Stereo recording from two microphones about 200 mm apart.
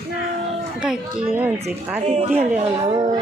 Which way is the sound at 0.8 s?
5° right (ahead or behind).